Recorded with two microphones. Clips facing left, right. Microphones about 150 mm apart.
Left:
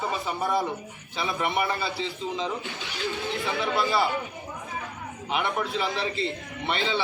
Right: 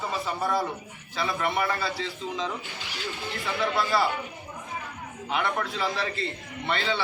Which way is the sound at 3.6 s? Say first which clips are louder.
Right 1 dB; 25° left (ahead or behind).